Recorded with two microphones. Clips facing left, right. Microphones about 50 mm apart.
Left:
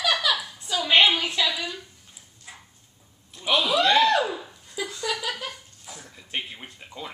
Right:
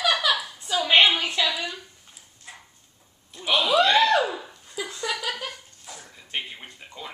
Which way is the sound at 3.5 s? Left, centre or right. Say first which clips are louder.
Right 1 dB; centre.